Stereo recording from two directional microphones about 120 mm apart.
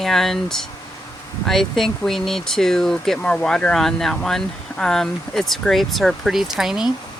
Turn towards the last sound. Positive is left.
turn(degrees=-5)  # may be behind; listen again after turning